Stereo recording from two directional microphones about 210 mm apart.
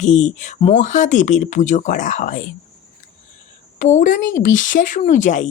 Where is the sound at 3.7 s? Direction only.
35° left (ahead or behind).